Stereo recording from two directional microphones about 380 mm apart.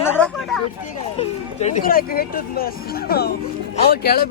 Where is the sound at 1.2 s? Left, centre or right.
Centre.